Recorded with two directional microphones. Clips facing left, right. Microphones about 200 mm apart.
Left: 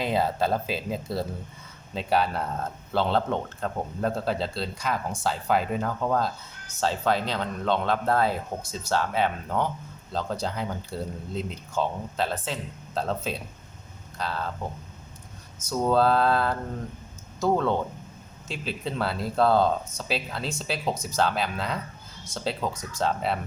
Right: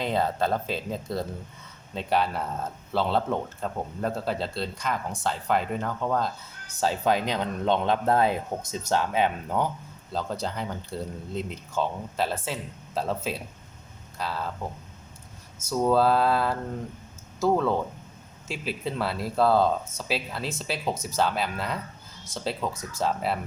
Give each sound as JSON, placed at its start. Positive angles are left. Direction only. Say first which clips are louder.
{"t": 0.0, "sound": "speech", "louder": "left 1 dB", "side_deg": 5}
{"t": 6.7, "sound": "speech", "louder": "right 1 dB", "side_deg": -15}
{"t": 10.1, "sound": "speech", "louder": "left 1 dB", "side_deg": -5}
{"t": 15.7, "sound": "speech", "louder": "even", "side_deg": -5}